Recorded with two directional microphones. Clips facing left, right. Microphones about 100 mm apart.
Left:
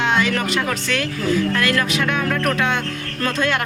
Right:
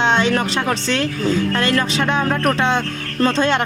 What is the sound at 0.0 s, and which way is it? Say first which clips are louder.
A woman's voice: right 3 dB; 30° right (ahead or behind).